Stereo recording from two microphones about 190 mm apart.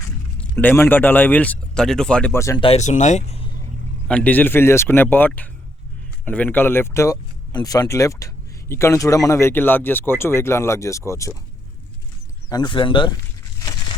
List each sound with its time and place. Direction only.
0.3 s speech: 10° left (ahead or behind)
2.6 s speech: 35° left (ahead or behind)
4.1 s speech: 10° left (ahead or behind)
12.5 s speech: 20° left (ahead or behind)